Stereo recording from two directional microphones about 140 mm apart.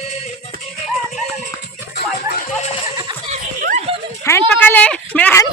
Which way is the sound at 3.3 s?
65° right (ahead or behind).